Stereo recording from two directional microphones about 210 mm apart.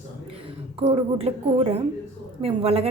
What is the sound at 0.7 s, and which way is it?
A woman's voice, 25° right (ahead or behind).